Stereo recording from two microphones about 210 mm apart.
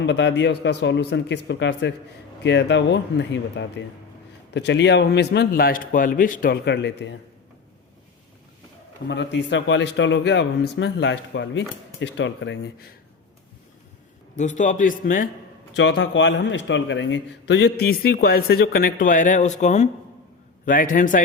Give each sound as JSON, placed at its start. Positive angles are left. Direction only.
{"t": 0.0, "sound": "a man's voice", "side_deg": 55}
{"t": 9.0, "sound": "a man's voice", "side_deg": 55}
{"t": 14.3, "sound": "a man's voice", "side_deg": 35}
{"t": 15.7, "sound": "a man's voice", "side_deg": 60}